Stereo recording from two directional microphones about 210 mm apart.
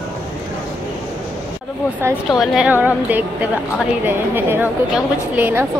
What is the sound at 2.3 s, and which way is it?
A woman's voice, centre (ahead or behind).